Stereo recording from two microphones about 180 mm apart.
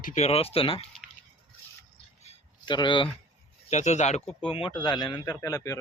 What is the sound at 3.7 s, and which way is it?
A man's voice, 40° left (ahead or behind).